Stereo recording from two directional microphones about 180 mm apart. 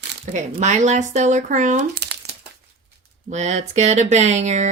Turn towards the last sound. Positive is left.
turn(degrees=-40)  # may be behind; listen again after turning